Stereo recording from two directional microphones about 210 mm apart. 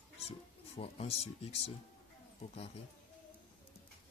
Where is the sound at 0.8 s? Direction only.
30° left (ahead or behind).